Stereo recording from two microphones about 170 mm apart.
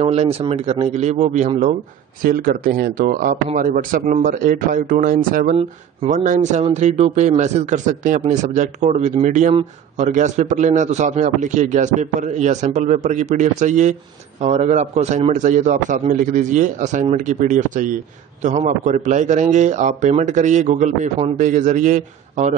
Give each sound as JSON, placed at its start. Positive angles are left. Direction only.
{"t": 0.0, "sound": "speech", "side_deg": -35}
{"t": 2.2, "sound": "speech", "side_deg": -55}